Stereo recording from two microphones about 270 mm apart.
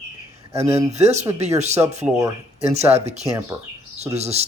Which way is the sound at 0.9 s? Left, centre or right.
Right.